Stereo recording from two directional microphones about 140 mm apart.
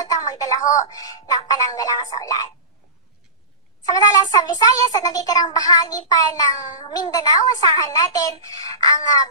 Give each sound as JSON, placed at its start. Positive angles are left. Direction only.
{"t": 0.0, "sound": "a sound", "side_deg": 25}
{"t": 0.7, "sound": "a child's voice", "side_deg": 25}
{"t": 3.8, "sound": "a child's voice", "side_deg": 25}